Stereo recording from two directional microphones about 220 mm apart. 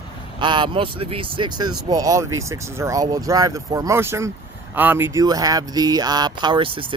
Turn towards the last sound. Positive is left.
turn(degrees=-25)  # may be behind; listen again after turning